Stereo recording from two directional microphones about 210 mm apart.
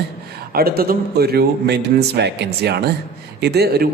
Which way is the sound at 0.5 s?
45° right (ahead or behind).